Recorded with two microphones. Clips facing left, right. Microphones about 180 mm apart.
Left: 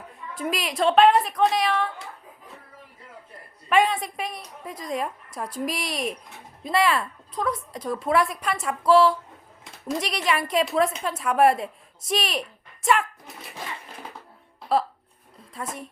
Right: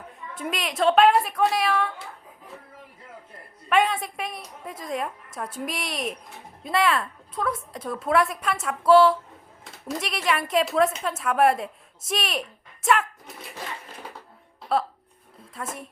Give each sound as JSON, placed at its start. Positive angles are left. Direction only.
{"t": 0.3, "sound": "a woman's voice", "side_deg": 0}
{"t": 3.7, "sound": "a woman's voice", "side_deg": 0}
{"t": 15.6, "sound": "a woman's voice", "side_deg": 0}